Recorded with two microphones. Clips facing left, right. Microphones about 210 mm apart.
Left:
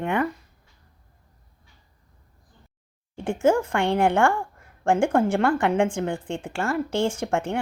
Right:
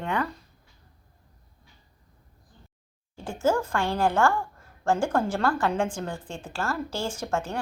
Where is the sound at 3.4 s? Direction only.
25° left (ahead or behind).